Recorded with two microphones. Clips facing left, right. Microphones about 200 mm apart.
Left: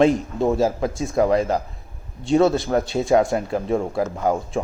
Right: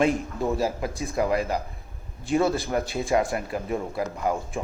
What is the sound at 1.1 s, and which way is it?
Speech, 45° left (ahead or behind).